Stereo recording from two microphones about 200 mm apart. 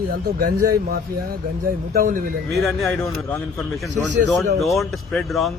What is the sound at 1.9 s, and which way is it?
Speech, 45° right (ahead or behind).